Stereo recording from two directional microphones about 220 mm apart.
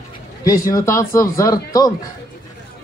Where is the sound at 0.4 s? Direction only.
15° left (ahead or behind).